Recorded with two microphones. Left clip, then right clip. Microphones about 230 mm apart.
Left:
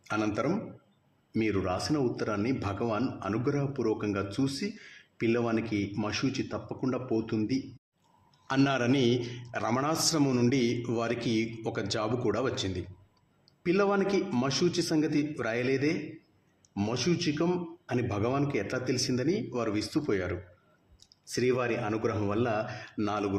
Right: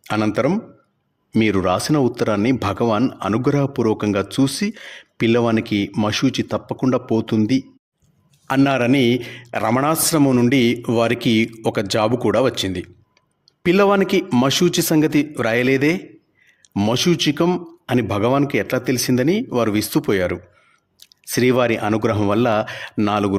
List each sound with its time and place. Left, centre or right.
0.0 s speech: right
8.4 s speech: right